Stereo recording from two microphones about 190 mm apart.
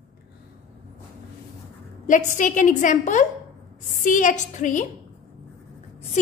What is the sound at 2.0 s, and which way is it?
A woman's voice, 45° left (ahead or behind).